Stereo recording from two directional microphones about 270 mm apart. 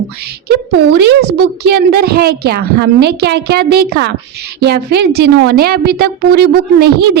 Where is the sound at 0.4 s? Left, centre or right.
Right.